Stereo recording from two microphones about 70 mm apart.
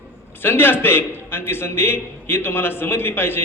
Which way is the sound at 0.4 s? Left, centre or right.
Left.